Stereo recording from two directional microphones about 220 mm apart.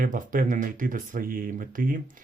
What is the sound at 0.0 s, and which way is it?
Speech, 40° right (ahead or behind).